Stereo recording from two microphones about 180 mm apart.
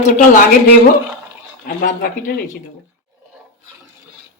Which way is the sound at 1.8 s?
50° left (ahead or behind).